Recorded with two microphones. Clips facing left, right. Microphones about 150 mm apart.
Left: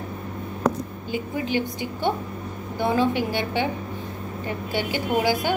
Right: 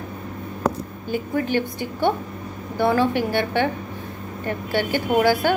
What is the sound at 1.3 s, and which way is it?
Speech, 15° left (ahead or behind).